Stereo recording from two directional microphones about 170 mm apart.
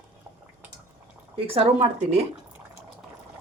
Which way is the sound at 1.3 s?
35° right (ahead or behind).